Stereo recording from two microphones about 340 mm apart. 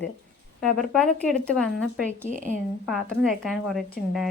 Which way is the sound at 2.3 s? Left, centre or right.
Right.